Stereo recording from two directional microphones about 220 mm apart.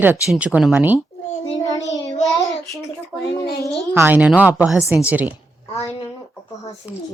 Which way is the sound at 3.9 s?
10° right (ahead or behind).